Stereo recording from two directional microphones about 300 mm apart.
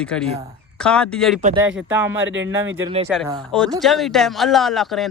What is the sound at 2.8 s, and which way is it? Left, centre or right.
Speech, centre.